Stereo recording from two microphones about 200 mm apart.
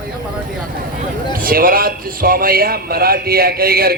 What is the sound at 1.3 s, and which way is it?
A man's voice, 45° right (ahead or behind).